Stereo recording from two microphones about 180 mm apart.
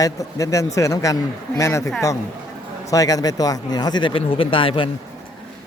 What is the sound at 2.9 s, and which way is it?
Speech, 20° left (ahead or behind).